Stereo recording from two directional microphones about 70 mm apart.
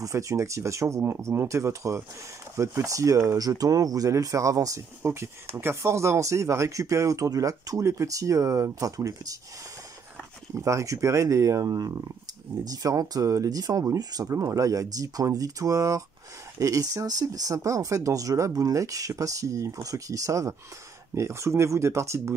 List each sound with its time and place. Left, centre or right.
0.0 s speech: right
5.0 s speech: right
10.5 s speech: right